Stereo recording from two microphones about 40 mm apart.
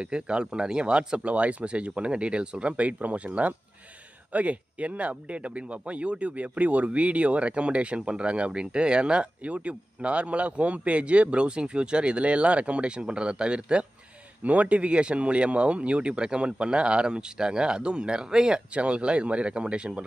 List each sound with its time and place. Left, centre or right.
0.0 s speech: right
14.4 s speech: right